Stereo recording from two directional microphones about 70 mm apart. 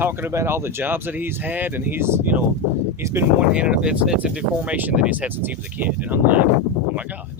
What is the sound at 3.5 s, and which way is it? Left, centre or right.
Speech, centre.